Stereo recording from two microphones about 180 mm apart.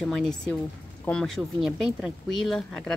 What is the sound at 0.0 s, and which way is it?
Speech, 5° left (ahead or behind).